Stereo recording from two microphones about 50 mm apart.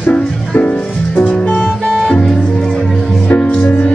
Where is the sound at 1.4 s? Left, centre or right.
Left.